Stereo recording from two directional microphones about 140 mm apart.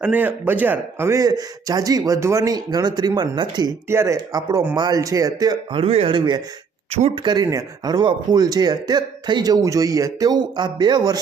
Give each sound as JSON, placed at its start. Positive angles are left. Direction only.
{"t": 0.0, "sound": "speech", "side_deg": -10}
{"t": 3.8, "sound": "speech", "side_deg": -20}
{"t": 5.8, "sound": "a man's voice", "side_deg": -40}